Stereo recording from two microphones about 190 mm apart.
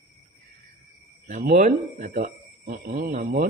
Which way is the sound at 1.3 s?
45° right (ahead or behind).